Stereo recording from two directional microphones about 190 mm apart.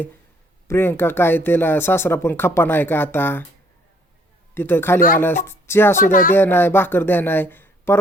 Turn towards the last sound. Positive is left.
turn(degrees=10)  # may be behind; listen again after turning